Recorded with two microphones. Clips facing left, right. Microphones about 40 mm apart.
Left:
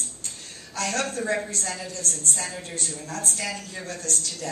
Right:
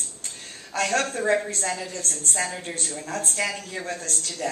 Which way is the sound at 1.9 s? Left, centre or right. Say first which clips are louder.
Even; right.